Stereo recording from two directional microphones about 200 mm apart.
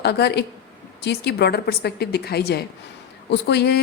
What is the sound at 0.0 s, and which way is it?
A woman's voice, 55° left (ahead or behind).